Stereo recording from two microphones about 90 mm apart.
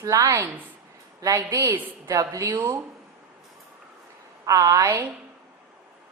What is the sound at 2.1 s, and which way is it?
Speech, 40° right (ahead or behind).